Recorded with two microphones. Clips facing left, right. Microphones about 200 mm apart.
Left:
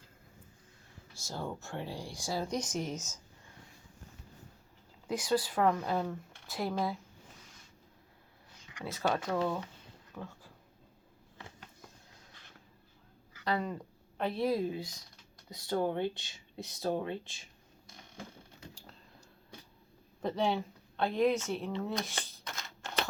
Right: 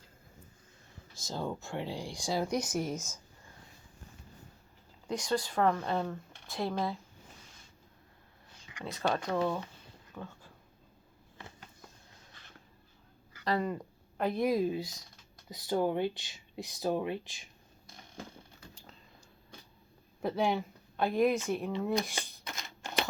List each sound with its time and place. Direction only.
1.1 s speech: 15° right (ahead or behind)
5.0 s speech: 5° left (ahead or behind)
7.3 s a sound: 30° right (ahead or behind)
8.6 s speech: centre (ahead or behind)
10.2 s a sound: 5° left (ahead or behind)
13.3 s speech: centre (ahead or behind)
14.2 s speech: 10° right (ahead or behind)
15.7 s speech: 10° right (ahead or behind)
16.0 s speech: 25° left (ahead or behind)
16.8 s speech: 15° right (ahead or behind)
20.2 s speech: 10° right (ahead or behind)